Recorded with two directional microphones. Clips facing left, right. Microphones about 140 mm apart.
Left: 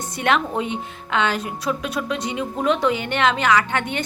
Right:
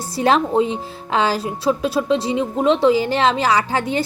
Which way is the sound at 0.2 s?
30° right (ahead or behind).